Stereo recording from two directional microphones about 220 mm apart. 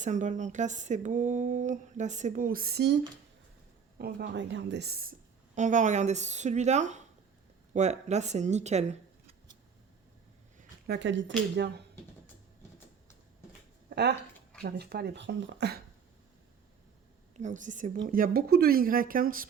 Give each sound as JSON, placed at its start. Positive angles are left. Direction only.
{"t": 0.0, "sound": "speech", "side_deg": -35}
{"t": 3.9, "sound": "speech", "side_deg": -45}
{"t": 5.5, "sound": "speech", "side_deg": -35}
{"t": 10.6, "sound": "speech", "side_deg": -45}
{"t": 13.9, "sound": "speech", "side_deg": -50}
{"t": 17.3, "sound": "speech", "side_deg": -35}